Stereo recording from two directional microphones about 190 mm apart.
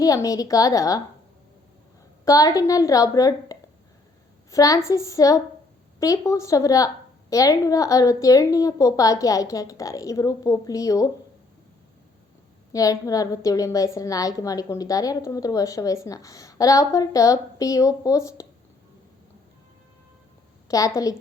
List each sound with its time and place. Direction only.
0.0 s a woman's voice: 20° left (ahead or behind)
2.2 s a woman's voice: 20° left (ahead or behind)
12.7 s a woman's voice: 20° left (ahead or behind)
20.7 s a woman's voice: 20° left (ahead or behind)